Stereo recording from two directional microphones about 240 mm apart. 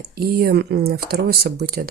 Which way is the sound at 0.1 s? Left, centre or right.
Right.